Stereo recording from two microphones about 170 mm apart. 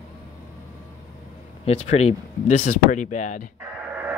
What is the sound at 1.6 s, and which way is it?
Speech, 40° left (ahead or behind).